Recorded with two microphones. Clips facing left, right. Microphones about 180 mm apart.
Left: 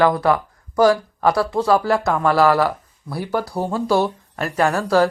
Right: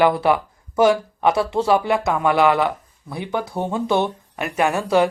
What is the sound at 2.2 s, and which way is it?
Speech, 15° right (ahead or behind).